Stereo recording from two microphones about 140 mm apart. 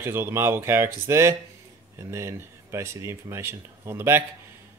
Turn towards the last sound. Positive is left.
turn(degrees=-15)  # may be behind; listen again after turning